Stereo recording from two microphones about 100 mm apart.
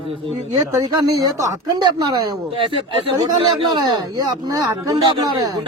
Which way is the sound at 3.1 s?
45° right (ahead or behind).